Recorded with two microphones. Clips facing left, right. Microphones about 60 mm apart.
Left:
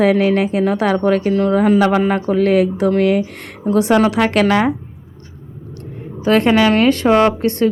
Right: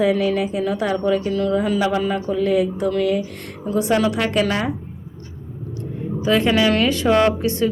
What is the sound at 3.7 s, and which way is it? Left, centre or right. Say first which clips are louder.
A woman's voice: left 5 dB; left.